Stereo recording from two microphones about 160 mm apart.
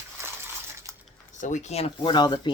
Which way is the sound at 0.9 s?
15° right (ahead or behind).